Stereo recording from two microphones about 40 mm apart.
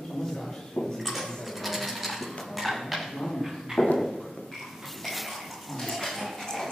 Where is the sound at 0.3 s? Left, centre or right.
Centre.